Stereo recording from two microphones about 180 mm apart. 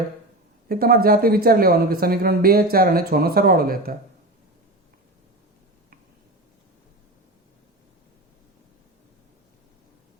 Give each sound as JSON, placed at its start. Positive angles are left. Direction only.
{"t": 0.7, "sound": "speech", "side_deg": -55}